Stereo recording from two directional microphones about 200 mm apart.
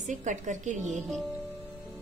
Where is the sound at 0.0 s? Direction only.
40° right (ahead or behind).